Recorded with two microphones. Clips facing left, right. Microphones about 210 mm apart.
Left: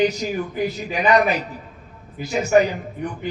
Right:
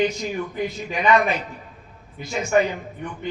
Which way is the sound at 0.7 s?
35° left (ahead or behind).